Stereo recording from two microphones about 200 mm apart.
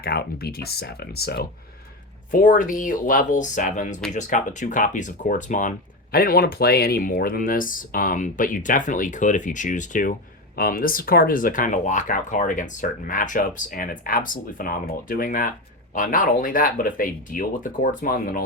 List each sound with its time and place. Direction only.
0.0 s speech: 50° left (ahead or behind)
2.3 s speech: 40° left (ahead or behind)